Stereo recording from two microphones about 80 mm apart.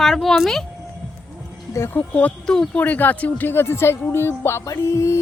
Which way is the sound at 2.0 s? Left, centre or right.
Centre.